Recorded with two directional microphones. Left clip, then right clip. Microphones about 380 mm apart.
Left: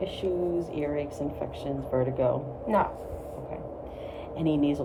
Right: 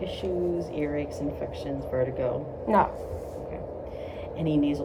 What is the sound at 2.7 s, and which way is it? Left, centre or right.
Speech, centre.